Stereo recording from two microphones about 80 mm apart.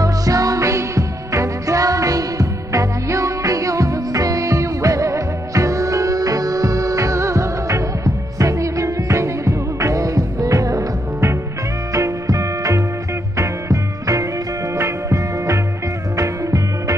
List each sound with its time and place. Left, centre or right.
0.0 s music: right